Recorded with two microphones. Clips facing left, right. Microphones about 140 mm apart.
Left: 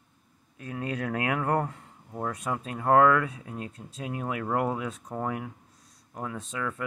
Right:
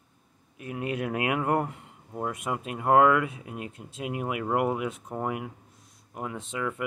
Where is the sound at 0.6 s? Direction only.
15° right (ahead or behind).